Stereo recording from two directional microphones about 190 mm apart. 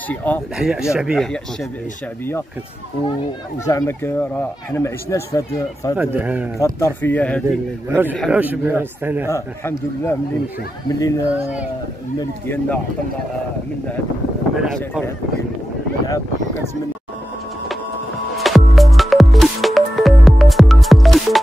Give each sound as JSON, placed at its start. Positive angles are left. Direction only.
{"t": 0.1, "sound": "speech", "side_deg": 10}
{"t": 0.6, "sound": "speech", "side_deg": -5}
{"t": 3.6, "sound": "speech", "side_deg": 15}
{"t": 5.9, "sound": "a man's voice", "side_deg": -10}
{"t": 6.6, "sound": "speech", "side_deg": 10}
{"t": 7.4, "sound": "a man's voice", "side_deg": -10}
{"t": 9.3, "sound": "speech", "side_deg": 10}
{"t": 12.4, "sound": "speech", "side_deg": 10}
{"t": 14.6, "sound": "speech", "side_deg": 0}
{"t": 18.4, "sound": "music", "side_deg": 0}